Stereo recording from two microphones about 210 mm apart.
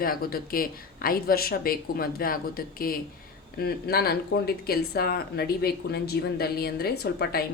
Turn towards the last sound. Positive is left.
turn(degrees=50)  # may be behind; listen again after turning